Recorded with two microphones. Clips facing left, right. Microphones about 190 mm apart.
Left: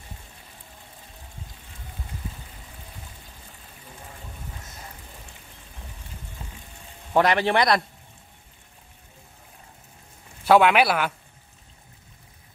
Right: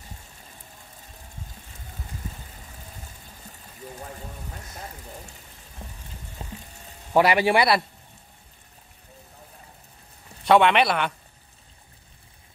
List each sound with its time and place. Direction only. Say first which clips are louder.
6.4 s water: right 6 dB; 35° right (ahead or behind)
7.2 s a man's voice: right 1 dB; 10° right (ahead or behind)
10.4 s speech: left 1 dB; 5° left (ahead or behind)